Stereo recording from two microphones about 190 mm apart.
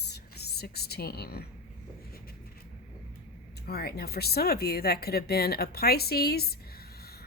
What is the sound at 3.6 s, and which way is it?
Speech, 55° left (ahead or behind).